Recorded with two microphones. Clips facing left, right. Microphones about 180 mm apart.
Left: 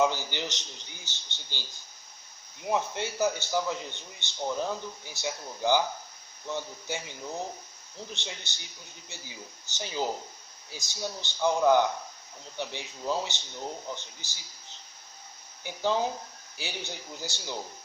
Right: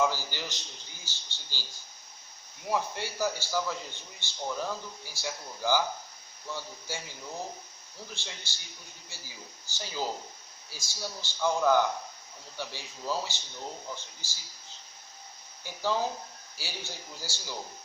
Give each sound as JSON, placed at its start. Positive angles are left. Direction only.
{"t": 0.0, "sound": "a man's voice", "side_deg": 20}
{"t": 2.6, "sound": "a man's voice", "side_deg": 20}
{"t": 8.1, "sound": "a man's voice", "side_deg": 20}
{"t": 15.6, "sound": "a man's voice", "side_deg": 20}